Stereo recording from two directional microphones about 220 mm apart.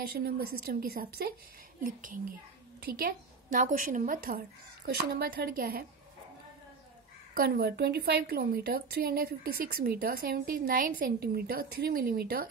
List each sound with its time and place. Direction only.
0.1 s a woman's voice: 45° right (ahead or behind)
7.3 s a woman's voice: 45° right (ahead or behind)